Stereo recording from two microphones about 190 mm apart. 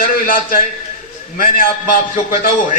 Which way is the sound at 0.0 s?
45° left (ahead or behind).